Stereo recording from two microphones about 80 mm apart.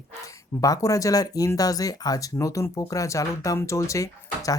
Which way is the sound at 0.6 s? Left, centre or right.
Left.